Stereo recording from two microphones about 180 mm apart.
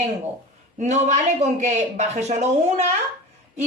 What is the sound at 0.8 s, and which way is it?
Speech, 40° right (ahead or behind).